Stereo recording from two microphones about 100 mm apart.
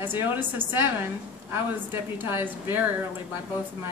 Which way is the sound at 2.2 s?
20° right (ahead or behind).